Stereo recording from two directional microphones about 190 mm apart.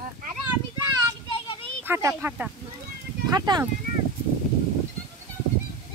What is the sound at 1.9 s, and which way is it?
Speech, 10° right (ahead or behind).